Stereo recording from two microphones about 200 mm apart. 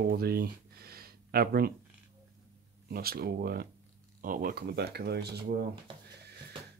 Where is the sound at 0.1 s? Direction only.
50° right (ahead or behind).